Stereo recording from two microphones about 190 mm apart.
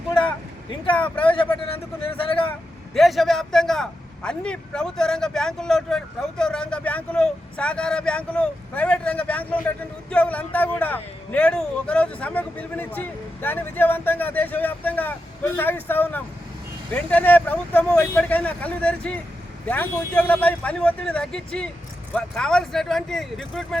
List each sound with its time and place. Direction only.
0.9 s speech: 10° left (ahead or behind)
1.2 s speech: 25° left (ahead or behind)
2.5 s speech: centre (ahead or behind)